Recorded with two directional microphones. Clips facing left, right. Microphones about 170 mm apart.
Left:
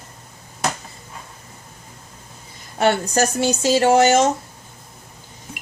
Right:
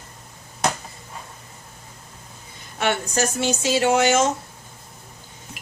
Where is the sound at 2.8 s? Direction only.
40° left (ahead or behind).